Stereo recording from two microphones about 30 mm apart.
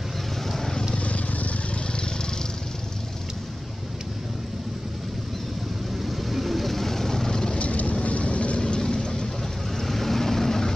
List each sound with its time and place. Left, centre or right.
0.9 s vehicle: left
6.0 s vehicle: centre; by 7.5 s left
7.5 s vehicle: left
8.5 s vehicle: left
9.8 s vehicle: centre